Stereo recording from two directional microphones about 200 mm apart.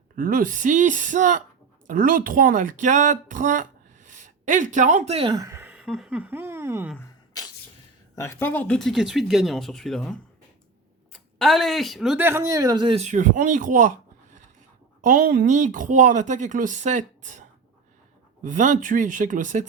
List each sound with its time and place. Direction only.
0.2 s speech: 45° right (ahead or behind); by 6.9 s 10° right (ahead or behind)
8.1 s speech: 15° left (ahead or behind); by 17.4 s 35° right (ahead or behind)
18.4 s speech: 40° right (ahead or behind)